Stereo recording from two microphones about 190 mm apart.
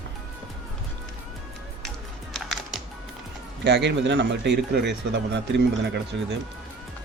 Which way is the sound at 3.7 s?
65° right (ahead or behind).